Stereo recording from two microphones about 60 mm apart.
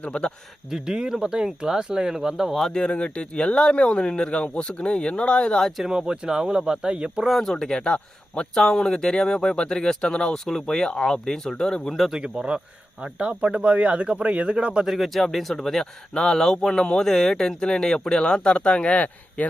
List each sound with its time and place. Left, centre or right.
0.0 s speech: centre
0.7 s speech: centre
2.7 s speech: centre
5.6 s speech: centre
5.9 s speech: centre
7.3 s speech: centre
7.5 s speech: centre
12.1 s speech: centre
14.9 s speech: centre; by 19.5 s left